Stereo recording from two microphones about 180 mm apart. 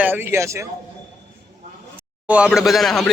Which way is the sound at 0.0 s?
10° right (ahead or behind).